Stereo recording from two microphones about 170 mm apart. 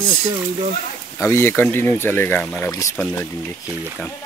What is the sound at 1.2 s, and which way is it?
Speech, 15° left (ahead or behind).